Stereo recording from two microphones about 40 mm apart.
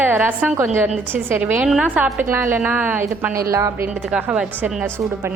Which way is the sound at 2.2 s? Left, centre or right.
Right.